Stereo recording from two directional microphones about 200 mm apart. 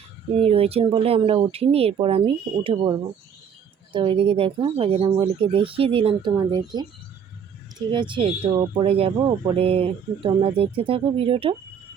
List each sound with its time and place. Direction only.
0.3 s speech: 30° right (ahead or behind)
3.9 s speech: 25° right (ahead or behind)